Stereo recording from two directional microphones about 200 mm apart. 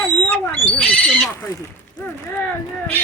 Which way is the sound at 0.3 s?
10° left (ahead or behind).